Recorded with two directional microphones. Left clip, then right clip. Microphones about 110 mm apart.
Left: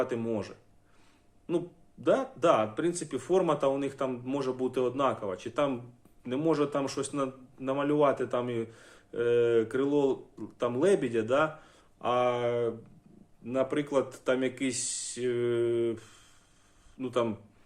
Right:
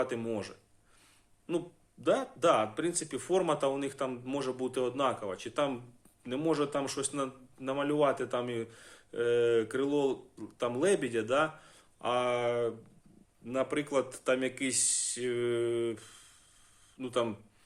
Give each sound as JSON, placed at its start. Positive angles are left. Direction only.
{"t": 0.0, "sound": "a man's voice", "side_deg": -15}